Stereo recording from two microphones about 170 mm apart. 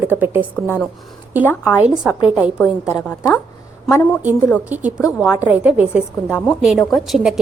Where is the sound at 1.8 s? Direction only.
5° right (ahead or behind).